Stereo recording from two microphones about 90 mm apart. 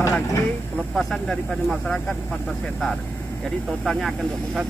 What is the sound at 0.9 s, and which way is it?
Speech, 5° left (ahead or behind).